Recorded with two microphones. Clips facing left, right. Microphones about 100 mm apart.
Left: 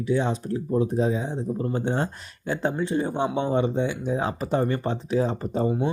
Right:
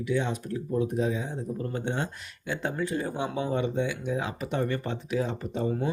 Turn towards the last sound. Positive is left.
turn(degrees=35)  # may be behind; listen again after turning